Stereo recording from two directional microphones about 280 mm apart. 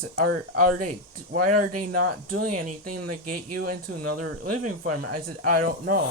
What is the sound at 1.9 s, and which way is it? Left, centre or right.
Speech, right.